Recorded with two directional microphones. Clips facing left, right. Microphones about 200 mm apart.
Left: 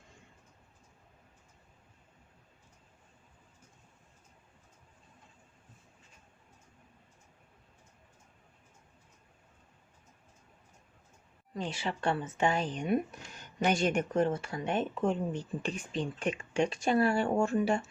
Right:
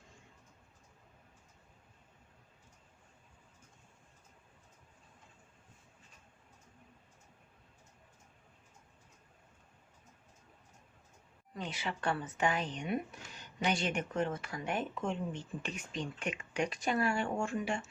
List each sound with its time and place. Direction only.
11.5 s a woman's voice: 30° left (ahead or behind)
12.7 s speech: 45° left (ahead or behind); by 15.0 s 25° left (ahead or behind)
15.0 s speech: 40° left (ahead or behind)